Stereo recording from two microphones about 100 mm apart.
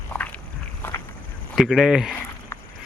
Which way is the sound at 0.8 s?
20° left (ahead or behind).